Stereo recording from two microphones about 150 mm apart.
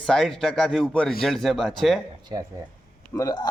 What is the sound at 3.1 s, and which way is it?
Speech, 25° left (ahead or behind).